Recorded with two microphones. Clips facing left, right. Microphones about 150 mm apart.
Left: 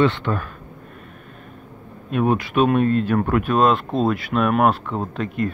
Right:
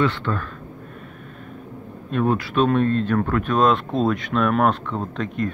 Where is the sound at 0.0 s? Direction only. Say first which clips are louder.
Left 3 dB; 20° left (ahead or behind).